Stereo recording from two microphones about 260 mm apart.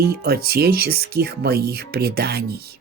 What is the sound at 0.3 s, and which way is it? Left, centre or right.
Speech, right.